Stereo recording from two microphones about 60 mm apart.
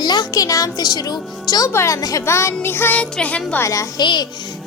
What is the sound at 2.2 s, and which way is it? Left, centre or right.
Music, left.